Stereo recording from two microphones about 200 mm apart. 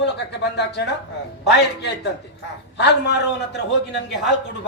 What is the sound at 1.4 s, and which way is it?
A man's voice, 55° left (ahead or behind).